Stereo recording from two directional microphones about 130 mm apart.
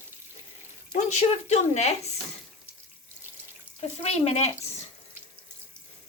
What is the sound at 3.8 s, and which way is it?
Speech, 50° left (ahead or behind).